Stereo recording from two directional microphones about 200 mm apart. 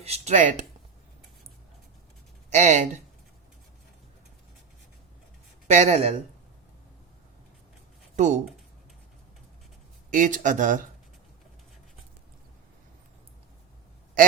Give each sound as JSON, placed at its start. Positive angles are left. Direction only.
{"t": 0.0, "sound": "speech", "side_deg": -30}
{"t": 2.5, "sound": "speech", "side_deg": -35}
{"t": 5.7, "sound": "speech", "side_deg": -35}
{"t": 8.1, "sound": "speech", "side_deg": -35}
{"t": 10.1, "sound": "speech", "side_deg": -40}
{"t": 14.2, "sound": "a sound", "side_deg": -45}